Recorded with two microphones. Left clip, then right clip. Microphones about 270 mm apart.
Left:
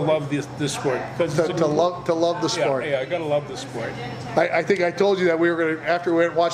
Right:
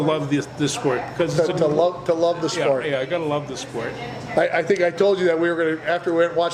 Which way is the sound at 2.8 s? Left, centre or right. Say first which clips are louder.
Right 1 dB; right.